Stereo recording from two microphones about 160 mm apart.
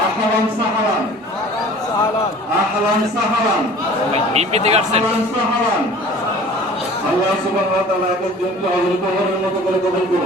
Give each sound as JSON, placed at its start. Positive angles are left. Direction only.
{"t": 4.1, "sound": "speech", "side_deg": -40}